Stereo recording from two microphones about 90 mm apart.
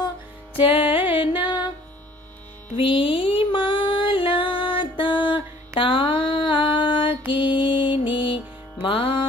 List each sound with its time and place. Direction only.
0.6 s music: 80° left; by 1.6 s 65° left (ahead or behind)
2.8 s music: 80° left; by 5.4 s 65° left (ahead or behind)
5.8 s a sound: 65° left (ahead or behind)
7.3 s music: 65° left (ahead or behind)